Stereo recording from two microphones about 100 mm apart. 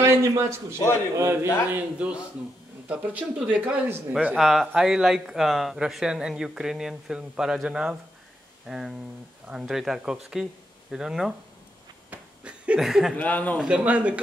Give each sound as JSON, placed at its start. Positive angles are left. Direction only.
{"t": 0.0, "sound": "a man's voice", "side_deg": -30}
{"t": 1.7, "sound": "speech", "side_deg": -15}
{"t": 4.4, "sound": "speech", "side_deg": 0}
{"t": 12.1, "sound": "a sound", "side_deg": -10}
{"t": 13.1, "sound": "speech", "side_deg": 15}
{"t": 13.6, "sound": "speech", "side_deg": -10}